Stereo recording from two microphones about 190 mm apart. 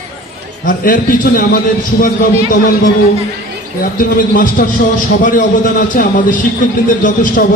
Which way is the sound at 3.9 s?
45° left (ahead or behind).